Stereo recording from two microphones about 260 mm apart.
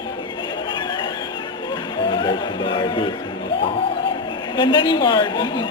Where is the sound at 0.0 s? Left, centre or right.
Centre.